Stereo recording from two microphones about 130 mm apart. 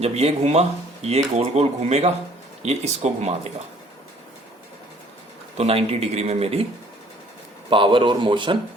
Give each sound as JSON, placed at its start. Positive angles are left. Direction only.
{"t": 0.0, "sound": "speech", "side_deg": -55}
{"t": 5.5, "sound": "speech", "side_deg": -50}
{"t": 7.7, "sound": "a man's voice", "side_deg": -40}